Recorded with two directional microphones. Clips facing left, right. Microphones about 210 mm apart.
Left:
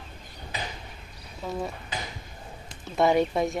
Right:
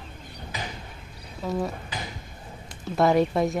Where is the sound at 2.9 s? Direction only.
Centre (ahead or behind).